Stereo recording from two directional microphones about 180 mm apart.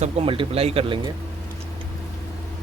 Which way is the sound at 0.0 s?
30° right (ahead or behind).